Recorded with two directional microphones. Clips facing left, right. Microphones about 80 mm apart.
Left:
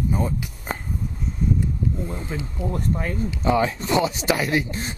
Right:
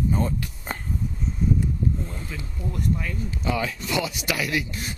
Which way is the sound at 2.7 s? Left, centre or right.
Left.